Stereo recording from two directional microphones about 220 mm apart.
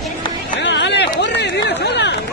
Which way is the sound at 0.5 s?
55° left (ahead or behind).